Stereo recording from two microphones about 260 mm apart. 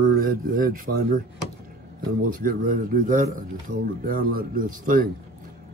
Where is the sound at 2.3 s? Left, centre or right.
Right.